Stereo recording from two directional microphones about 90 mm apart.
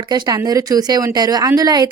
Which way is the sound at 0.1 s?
45° right (ahead or behind).